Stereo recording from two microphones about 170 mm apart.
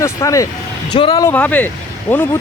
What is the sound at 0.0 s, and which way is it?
Speech, 20° left (ahead or behind).